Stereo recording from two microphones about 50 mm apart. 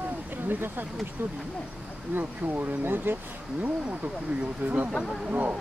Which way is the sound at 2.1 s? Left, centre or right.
Right.